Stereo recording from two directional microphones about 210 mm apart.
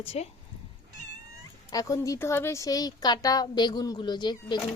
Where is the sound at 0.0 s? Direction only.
25° left (ahead or behind).